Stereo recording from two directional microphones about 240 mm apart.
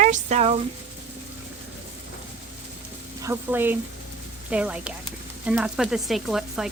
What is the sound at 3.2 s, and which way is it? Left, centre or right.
Speech, centre.